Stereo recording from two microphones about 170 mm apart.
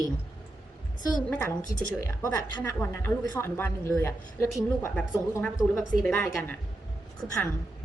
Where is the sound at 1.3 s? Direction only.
10° left (ahead or behind).